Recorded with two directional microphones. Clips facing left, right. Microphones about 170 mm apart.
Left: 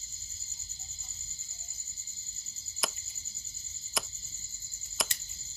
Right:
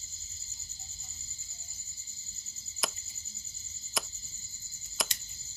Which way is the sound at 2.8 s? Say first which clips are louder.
Even; centre (ahead or behind).